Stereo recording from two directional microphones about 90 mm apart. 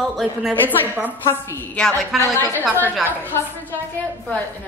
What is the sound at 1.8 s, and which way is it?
Speech, 10° left (ahead or behind).